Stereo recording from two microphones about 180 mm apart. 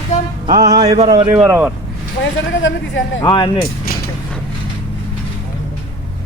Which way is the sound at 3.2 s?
25° left (ahead or behind).